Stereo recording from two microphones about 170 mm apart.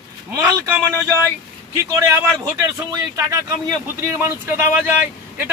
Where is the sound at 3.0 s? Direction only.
15° right (ahead or behind).